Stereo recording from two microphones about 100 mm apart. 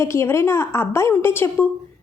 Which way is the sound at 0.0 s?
25° left (ahead or behind).